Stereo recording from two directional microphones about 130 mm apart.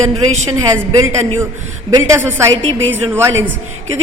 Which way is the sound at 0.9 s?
20° right (ahead or behind).